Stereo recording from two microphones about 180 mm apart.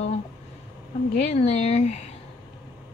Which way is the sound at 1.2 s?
35° left (ahead or behind).